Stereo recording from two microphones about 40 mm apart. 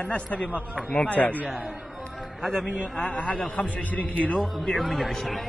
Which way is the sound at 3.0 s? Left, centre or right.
Left.